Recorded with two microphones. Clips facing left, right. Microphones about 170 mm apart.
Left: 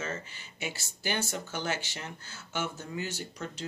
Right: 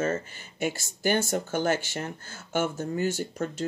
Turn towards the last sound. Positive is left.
turn(degrees=-50)  # may be behind; listen again after turning